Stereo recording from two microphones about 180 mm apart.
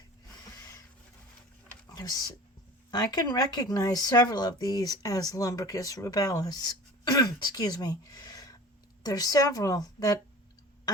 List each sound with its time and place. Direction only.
2.0 s speech: 20° left (ahead or behind)